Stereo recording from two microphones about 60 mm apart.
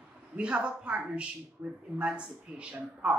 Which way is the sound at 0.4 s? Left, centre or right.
Centre.